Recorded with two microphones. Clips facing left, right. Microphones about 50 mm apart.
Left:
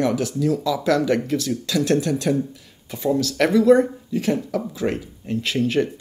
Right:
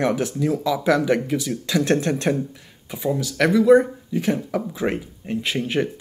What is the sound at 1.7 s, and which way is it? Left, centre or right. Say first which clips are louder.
Speech: even; right.